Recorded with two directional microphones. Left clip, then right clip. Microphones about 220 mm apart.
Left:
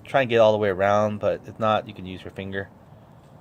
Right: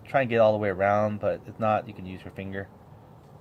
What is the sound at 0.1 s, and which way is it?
A man's voice, 25° left (ahead or behind).